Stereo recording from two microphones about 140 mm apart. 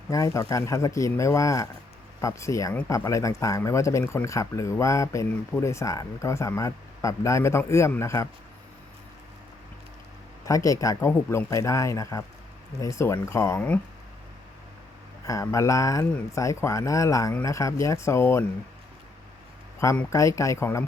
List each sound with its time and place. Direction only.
0.1 s speech: 25° left (ahead or behind)
10.4 s speech: 25° left (ahead or behind)
15.3 s speech: 20° left (ahead or behind)
20.1 s speech: 20° left (ahead or behind)